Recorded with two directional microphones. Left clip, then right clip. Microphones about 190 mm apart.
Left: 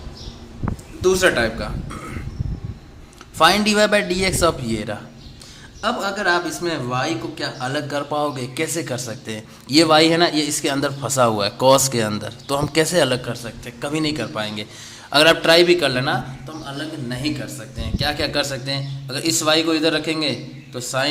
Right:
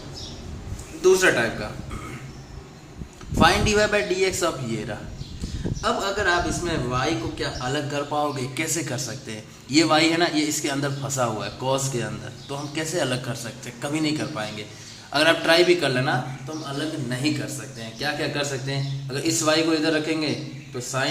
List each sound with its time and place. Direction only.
1.0 s a man's voice: 35° left (ahead or behind)
3.3 s a man's voice: 35° left (ahead or behind)
18.0 s a man's voice: 50° left (ahead or behind)